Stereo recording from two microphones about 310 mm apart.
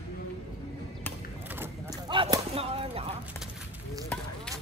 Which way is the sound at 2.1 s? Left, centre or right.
Centre.